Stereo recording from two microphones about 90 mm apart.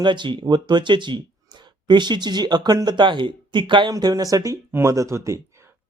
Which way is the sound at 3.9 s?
45° right (ahead or behind).